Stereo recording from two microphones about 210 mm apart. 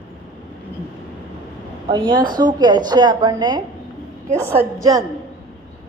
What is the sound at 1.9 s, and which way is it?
A woman's voice, 20° right (ahead or behind).